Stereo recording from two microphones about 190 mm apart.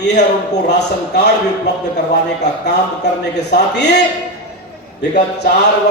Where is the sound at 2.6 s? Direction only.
65° left (ahead or behind).